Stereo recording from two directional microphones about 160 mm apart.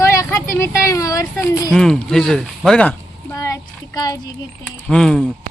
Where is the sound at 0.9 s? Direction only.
20° left (ahead or behind).